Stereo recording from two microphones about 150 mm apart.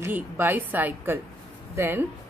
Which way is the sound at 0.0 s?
15° right (ahead or behind).